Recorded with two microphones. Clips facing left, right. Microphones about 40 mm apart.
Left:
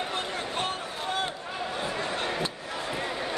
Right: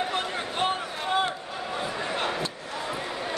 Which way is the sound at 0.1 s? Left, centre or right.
Right.